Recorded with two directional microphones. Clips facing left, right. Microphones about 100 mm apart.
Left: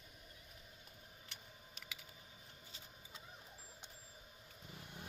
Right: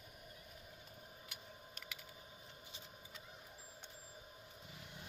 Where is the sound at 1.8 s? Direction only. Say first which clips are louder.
Right 3 dB; centre (ahead or behind).